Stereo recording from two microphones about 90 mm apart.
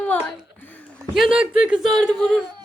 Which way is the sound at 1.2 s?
10° right (ahead or behind).